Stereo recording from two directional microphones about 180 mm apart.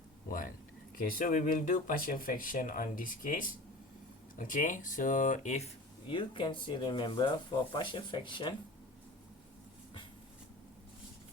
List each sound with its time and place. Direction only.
0.3 s a sound: 50° left (ahead or behind)
0.9 s speech: 50° left (ahead or behind)
6.1 s speech: 25° left (ahead or behind)